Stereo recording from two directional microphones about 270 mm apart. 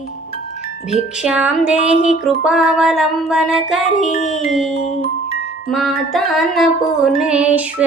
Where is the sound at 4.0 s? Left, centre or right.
Left.